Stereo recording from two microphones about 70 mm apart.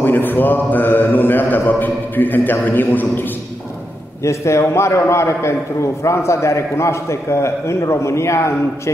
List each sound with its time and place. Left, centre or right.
0.0 s a man's voice: left
4.2 s a man's voice: left